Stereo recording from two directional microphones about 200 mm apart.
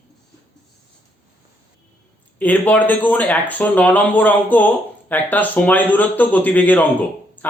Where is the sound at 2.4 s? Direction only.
10° left (ahead or behind).